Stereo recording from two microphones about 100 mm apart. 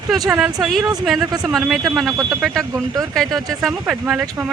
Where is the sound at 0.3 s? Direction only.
5° right (ahead or behind).